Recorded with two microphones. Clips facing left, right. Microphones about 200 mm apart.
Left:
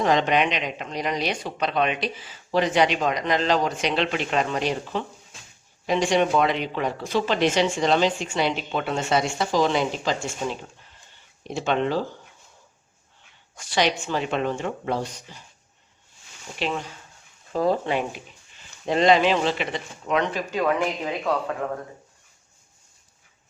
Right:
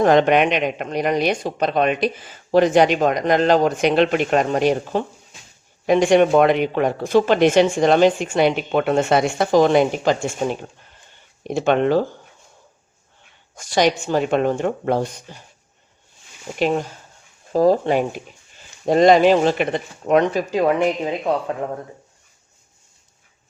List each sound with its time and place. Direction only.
0.0 s speech: 55° right (ahead or behind)
13.6 s speech: 45° right (ahead or behind)
16.6 s speech: 45° right (ahead or behind)
20.5 s speech: 30° right (ahead or behind)